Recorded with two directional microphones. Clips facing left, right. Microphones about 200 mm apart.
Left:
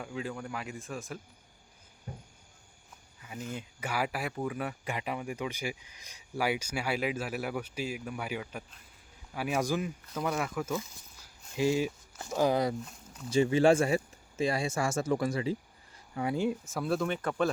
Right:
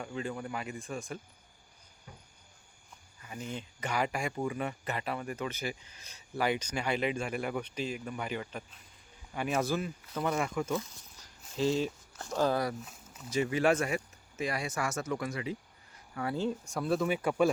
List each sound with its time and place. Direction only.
0.0 s speech: centre (ahead or behind)
2.1 s a sound: 45° left (ahead or behind)
3.5 s speech: 10° left (ahead or behind)
4.9 s speech: 15° left (ahead or behind)
10.2 s speech: centre (ahead or behind); by 12.7 s 20° left (ahead or behind)
12.8 s a sound: centre (ahead or behind)
13.3 s speech: 30° left (ahead or behind)
16.1 s speech: 15° left (ahead or behind); by 17.5 s 10° right (ahead or behind)